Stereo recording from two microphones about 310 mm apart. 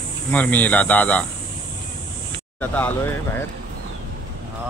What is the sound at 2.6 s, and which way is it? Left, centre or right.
Speech, centre.